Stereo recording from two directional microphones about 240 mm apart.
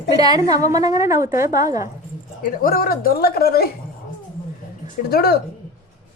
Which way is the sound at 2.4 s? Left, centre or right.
Left.